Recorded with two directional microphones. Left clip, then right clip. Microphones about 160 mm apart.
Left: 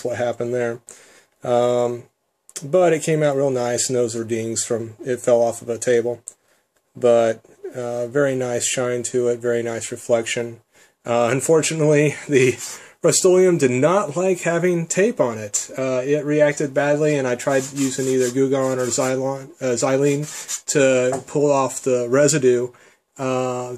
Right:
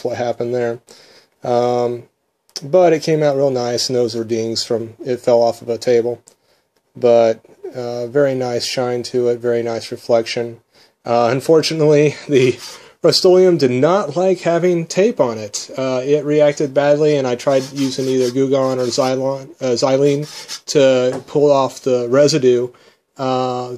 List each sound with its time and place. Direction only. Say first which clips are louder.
0.0 s speech: right 3 dB; 20° right (ahead or behind)